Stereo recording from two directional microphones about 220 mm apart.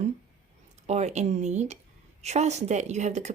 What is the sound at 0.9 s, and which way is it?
Speech, 30° right (ahead or behind).